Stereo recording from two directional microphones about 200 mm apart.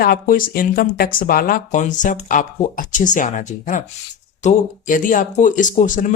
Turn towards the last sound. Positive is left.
turn(degrees=40)  # may be behind; listen again after turning